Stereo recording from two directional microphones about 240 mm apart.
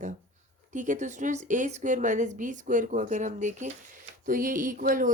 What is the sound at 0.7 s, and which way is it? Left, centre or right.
A woman's voice, right.